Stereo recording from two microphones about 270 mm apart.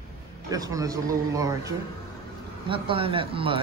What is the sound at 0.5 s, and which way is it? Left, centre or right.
Speech, centre.